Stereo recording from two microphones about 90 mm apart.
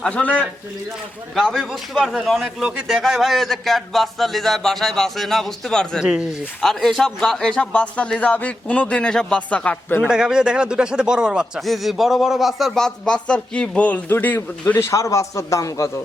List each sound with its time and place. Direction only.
0.0 s a man's voice: 15° left (ahead or behind)
1.4 s a man's voice: centre (ahead or behind); by 10.1 s 15° left (ahead or behind)
10.1 s speech: 10° right (ahead or behind); by 14.9 s 25° left (ahead or behind)
14.9 s a man's voice: 35° left (ahead or behind)